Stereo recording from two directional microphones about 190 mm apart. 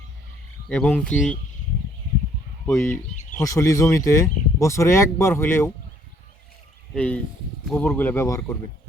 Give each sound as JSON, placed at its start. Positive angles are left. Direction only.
{"t": 0.7, "sound": "speech", "side_deg": 5}
{"t": 2.6, "sound": "speech", "side_deg": 15}
{"t": 6.9, "sound": "speech", "side_deg": 5}